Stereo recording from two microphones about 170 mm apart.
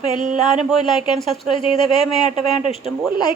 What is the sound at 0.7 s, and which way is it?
Speech, 30° left (ahead or behind).